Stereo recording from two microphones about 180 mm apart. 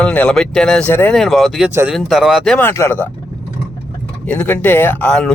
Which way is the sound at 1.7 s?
15° right (ahead or behind).